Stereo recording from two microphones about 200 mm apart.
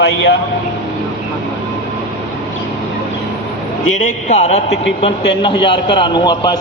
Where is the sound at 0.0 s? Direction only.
60° left (ahead or behind).